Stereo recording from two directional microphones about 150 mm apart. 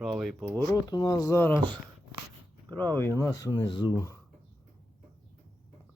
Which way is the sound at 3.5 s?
30° left (ahead or behind).